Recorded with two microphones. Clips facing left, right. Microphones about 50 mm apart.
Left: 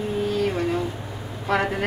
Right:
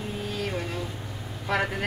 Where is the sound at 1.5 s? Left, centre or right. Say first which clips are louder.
Left 4 dB; centre.